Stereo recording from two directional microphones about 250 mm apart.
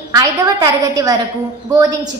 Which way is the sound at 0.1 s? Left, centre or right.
Centre.